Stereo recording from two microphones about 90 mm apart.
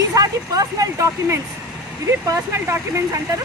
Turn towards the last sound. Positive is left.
turn(degrees=-30)  # may be behind; listen again after turning